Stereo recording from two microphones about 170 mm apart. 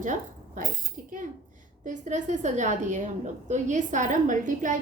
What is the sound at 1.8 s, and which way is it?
A woman's voice, 45° right (ahead or behind).